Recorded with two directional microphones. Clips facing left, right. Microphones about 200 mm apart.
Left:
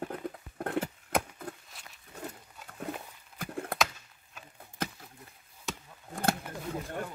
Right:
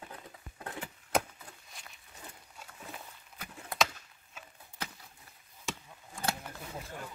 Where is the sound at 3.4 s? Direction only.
55° left (ahead or behind).